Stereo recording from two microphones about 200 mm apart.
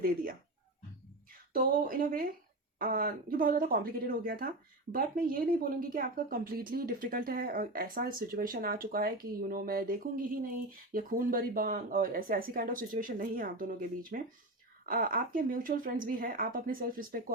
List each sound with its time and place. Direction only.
1.5 s a woman's voice: 45° right (ahead or behind)